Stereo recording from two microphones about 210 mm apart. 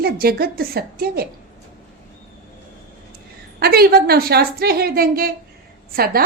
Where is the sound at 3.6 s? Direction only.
45° right (ahead or behind).